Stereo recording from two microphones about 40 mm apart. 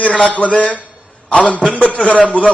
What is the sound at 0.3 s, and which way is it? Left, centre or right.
A man's voice, left.